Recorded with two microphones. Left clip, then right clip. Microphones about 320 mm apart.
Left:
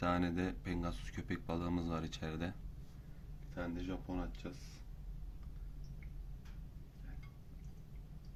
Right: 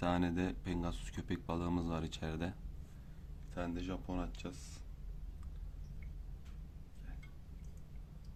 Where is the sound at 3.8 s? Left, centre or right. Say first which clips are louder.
Right 1 dB; centre.